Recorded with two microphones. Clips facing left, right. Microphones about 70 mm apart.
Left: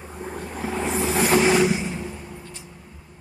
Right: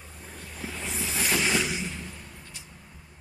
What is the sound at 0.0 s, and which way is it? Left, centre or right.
Vehicle, left.